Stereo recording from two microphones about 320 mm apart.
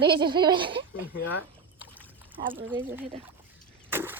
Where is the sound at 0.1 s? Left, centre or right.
Centre.